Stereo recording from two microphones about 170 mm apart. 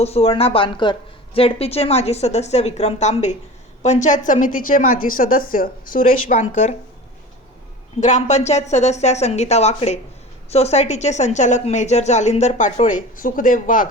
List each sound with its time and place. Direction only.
0.0 s a woman's voice: 35° left (ahead or behind)
8.0 s a woman's voice: 45° left (ahead or behind)